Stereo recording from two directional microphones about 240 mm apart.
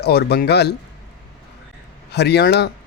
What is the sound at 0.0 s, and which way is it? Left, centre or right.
Speech, left.